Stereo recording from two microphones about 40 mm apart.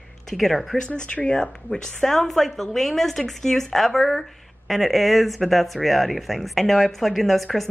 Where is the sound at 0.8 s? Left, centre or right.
Left.